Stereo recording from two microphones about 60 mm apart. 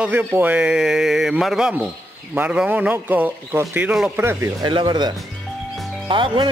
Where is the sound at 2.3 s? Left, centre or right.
Right.